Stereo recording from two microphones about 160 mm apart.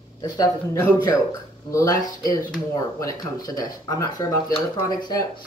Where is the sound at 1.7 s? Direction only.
20° left (ahead or behind).